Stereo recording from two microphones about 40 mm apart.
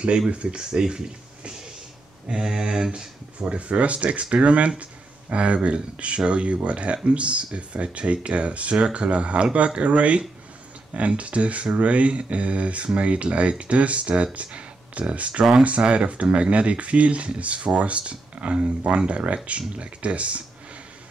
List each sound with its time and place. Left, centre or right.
0.3 s speech: right
2.2 s mantra: centre
3.0 s speech: right